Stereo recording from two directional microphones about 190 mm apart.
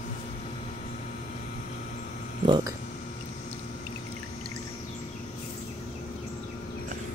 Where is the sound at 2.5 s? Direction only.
25° right (ahead or behind).